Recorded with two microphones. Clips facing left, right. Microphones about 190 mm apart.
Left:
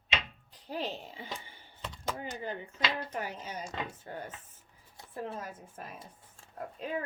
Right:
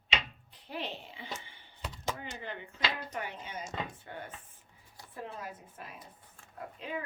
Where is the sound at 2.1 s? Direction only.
40° left (ahead or behind).